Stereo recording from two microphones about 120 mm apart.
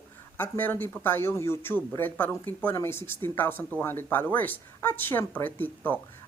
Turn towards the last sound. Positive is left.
turn(degrees=15)  # may be behind; listen again after turning